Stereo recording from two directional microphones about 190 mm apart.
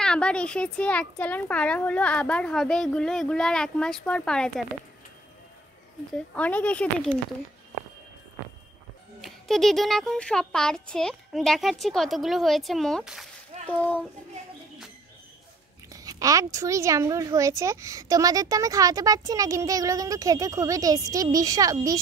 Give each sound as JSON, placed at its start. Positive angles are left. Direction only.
{"t": 0.0, "sound": "speech", "side_deg": 5}
{"t": 6.3, "sound": "speech", "side_deg": 5}
{"t": 9.2, "sound": "speech", "side_deg": 0}
{"t": 13.5, "sound": "a sound", "side_deg": -35}
{"t": 15.9, "sound": "a woman's voice", "side_deg": -20}